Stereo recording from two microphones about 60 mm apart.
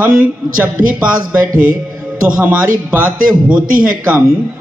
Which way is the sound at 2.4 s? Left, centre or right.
Right.